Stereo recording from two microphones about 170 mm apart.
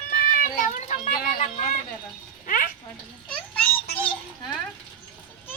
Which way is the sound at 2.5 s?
50° left (ahead or behind).